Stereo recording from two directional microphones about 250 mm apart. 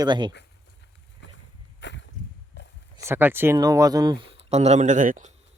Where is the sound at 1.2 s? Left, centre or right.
Left.